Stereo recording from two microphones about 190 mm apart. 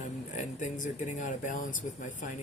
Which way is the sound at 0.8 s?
40° left (ahead or behind).